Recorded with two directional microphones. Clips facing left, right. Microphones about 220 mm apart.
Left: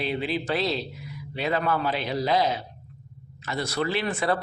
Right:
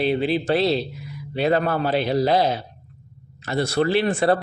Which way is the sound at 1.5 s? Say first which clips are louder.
Right 4 dB; 40° right (ahead or behind).